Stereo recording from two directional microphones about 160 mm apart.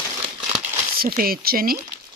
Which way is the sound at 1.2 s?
70° right (ahead or behind).